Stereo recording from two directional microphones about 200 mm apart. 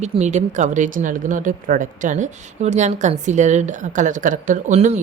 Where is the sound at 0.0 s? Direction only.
35° right (ahead or behind).